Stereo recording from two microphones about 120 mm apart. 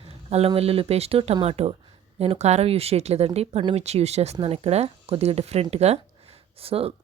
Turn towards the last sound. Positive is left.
turn(degrees=-55)  # may be behind; listen again after turning